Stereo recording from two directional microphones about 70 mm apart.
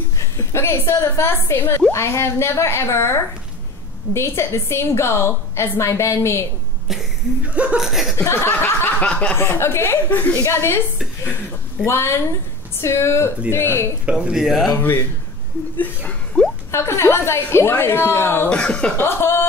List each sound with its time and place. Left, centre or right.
0.2 s a sound: left
0.9 s a woman's voice: left
7.4 s chuckle: centre
7.8 s speech: centre
8.2 s chuckle: left
9.0 s snicker: centre
9.4 s a woman's voice: left
10.4 s a woman's voice: left
11.8 s a woman's voice: left
14.1 s speech: centre
14.8 s speech: left
16.7 s a woman's voice: left
18.5 s speech: centre
18.9 s speech: left